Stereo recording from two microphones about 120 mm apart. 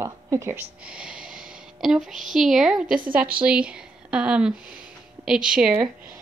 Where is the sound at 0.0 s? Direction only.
25° right (ahead or behind).